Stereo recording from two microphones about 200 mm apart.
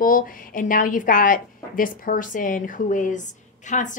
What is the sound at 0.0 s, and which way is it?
A woman's voice, 45° left (ahead or behind).